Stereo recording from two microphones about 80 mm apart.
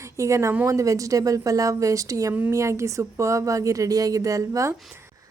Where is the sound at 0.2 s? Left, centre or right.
Right.